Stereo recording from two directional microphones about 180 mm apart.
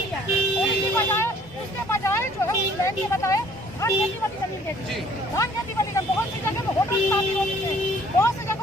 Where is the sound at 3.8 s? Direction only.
15° left (ahead or behind).